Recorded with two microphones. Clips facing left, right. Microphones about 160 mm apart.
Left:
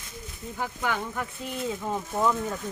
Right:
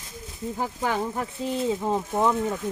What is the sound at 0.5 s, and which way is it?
Speech, 35° right (ahead or behind).